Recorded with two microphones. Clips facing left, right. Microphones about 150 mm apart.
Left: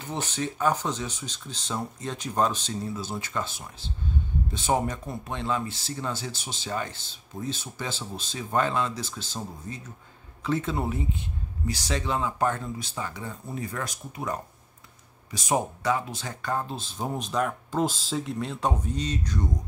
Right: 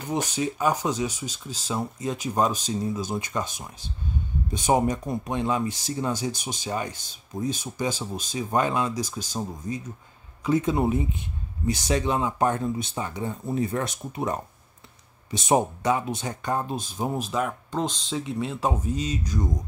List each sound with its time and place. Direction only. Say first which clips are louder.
0.0 s speech: right 4 dB; 15° right (ahead or behind)